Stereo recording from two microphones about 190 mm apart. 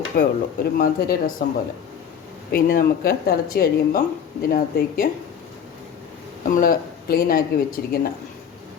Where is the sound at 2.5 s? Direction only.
50° left (ahead or behind).